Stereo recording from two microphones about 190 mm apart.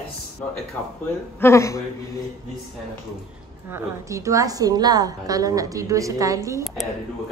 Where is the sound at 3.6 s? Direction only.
15° right (ahead or behind).